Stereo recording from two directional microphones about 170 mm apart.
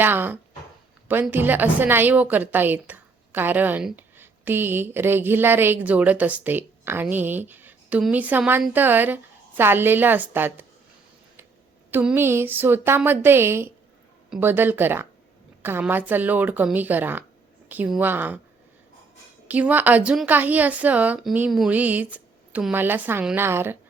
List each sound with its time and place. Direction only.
0.0 s a woman's voice: 10° right (ahead or behind)
11.9 s a woman's voice: 10° right (ahead or behind)
19.5 s a woman's voice: 10° right (ahead or behind)